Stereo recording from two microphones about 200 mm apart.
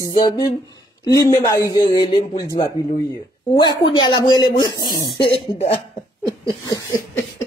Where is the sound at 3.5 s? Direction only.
20° left (ahead or behind).